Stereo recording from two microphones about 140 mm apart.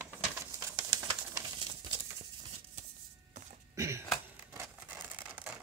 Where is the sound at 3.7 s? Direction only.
20° right (ahead or behind).